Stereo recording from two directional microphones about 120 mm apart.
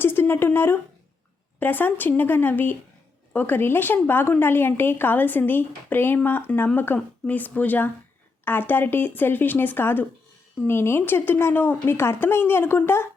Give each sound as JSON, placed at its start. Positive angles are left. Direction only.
{"t": 0.0, "sound": "a woman's voice", "side_deg": 20}